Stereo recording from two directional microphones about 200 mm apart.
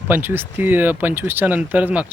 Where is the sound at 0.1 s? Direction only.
10° right (ahead or behind).